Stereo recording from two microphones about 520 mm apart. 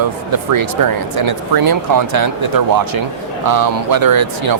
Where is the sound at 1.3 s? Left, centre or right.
Right.